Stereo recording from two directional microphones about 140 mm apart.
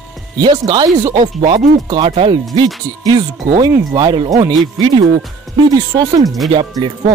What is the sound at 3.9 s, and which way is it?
Speech, 30° right (ahead or behind).